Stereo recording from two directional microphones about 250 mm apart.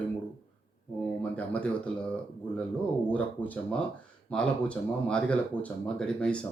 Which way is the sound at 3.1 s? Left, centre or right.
Centre.